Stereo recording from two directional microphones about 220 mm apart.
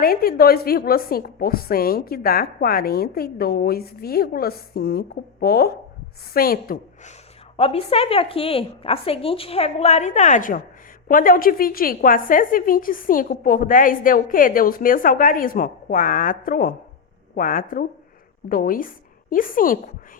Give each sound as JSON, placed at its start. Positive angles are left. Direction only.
{"t": 0.0, "sound": "a woman's voice", "side_deg": 40}
{"t": 7.5, "sound": "a woman's voice", "side_deg": 25}